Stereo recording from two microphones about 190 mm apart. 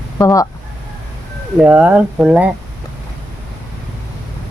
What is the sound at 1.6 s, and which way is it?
Speech, 10° right (ahead or behind).